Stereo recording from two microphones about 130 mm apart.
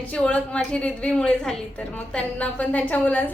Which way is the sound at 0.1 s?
10° left (ahead or behind).